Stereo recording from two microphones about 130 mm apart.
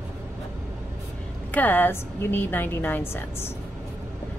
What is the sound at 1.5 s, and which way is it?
A woman's voice, 15° left (ahead or behind).